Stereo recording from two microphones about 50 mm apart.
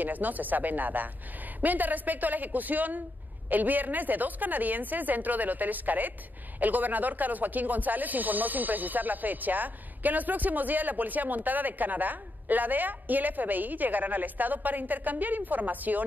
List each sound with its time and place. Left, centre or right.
0.0 s speech: right